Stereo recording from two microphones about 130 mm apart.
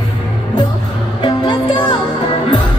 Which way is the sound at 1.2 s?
35° left (ahead or behind).